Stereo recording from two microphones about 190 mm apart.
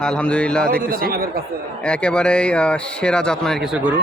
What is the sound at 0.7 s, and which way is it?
Speech, 50° right (ahead or behind).